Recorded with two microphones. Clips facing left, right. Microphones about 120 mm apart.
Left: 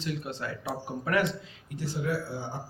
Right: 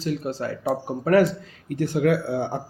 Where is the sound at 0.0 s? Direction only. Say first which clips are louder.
Right 8 dB; 40° right (ahead or behind).